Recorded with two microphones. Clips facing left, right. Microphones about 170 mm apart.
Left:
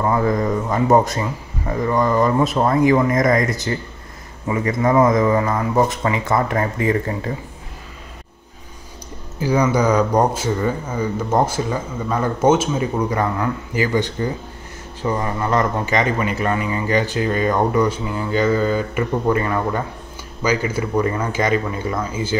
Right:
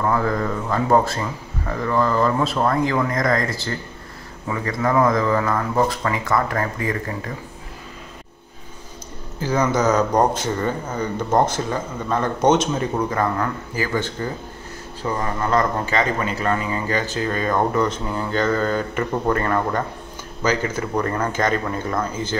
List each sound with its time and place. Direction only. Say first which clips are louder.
0.0 s speech: left 3 dB; 15° left (ahead or behind)
9.4 s speech: left 2 dB; 10° left (ahead or behind)